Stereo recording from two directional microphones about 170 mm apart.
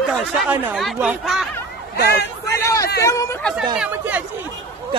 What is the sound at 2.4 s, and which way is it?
Hubbub, 15° left (ahead or behind).